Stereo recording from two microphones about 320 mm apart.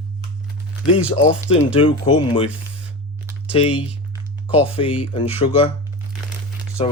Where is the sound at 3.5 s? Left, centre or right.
Centre.